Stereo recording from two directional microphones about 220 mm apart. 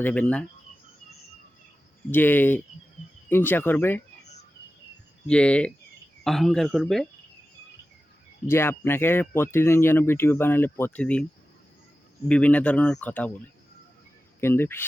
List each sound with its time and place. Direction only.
0.0 s speech: 5° left (ahead or behind)
2.0 s speech: 10° left (ahead or behind)
5.2 s speech: 5° left (ahead or behind)
8.4 s speech: 10° left (ahead or behind)
12.3 s speech: 5° left (ahead or behind)
14.4 s speech: 10° left (ahead or behind)